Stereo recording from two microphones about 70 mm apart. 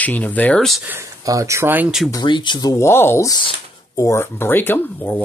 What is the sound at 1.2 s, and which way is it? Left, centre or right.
Speech, right.